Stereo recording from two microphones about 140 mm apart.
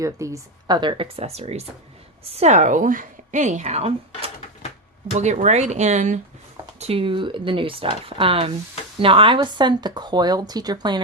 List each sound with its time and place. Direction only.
0.2 s a woman's voice: 20° right (ahead or behind)
0.7 s a woman's voice: 35° right (ahead or behind); by 6.1 s 60° right (ahead or behind)
6.7 s speech: 45° right (ahead or behind); by 11.0 s 30° right (ahead or behind)